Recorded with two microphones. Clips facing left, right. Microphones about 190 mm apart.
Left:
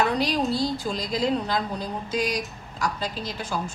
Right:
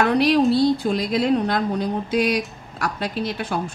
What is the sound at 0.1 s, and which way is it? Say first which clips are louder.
A woman's voice: right 8 dB; 65° right (ahead or behind).